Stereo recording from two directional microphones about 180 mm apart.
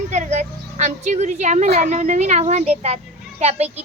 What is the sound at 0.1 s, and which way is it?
A woman's voice, 40° right (ahead or behind).